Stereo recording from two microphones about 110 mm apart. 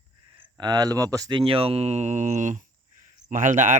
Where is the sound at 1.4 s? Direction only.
55° right (ahead or behind); by 2.6 s 90° right.